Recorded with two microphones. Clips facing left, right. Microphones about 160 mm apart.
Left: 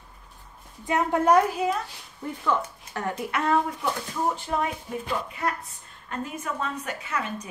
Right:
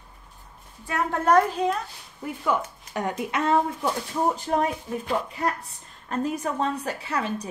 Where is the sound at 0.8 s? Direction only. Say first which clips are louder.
Left 2 dB; 15° left (ahead or behind).